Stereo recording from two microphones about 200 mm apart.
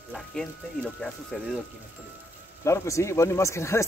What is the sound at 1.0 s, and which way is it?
Speech, 5° left (ahead or behind).